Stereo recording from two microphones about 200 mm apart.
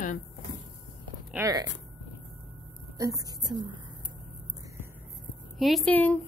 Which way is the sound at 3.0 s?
15° right (ahead or behind).